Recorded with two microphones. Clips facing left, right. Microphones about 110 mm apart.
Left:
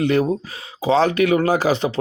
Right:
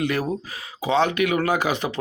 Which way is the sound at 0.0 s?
30° left (ahead or behind).